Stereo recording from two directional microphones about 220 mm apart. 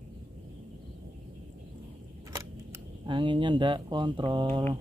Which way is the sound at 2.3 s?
15° right (ahead or behind).